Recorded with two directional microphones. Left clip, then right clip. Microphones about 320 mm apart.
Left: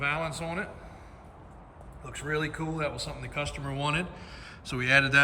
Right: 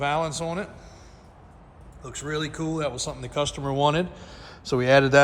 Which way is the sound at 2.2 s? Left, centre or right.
Centre.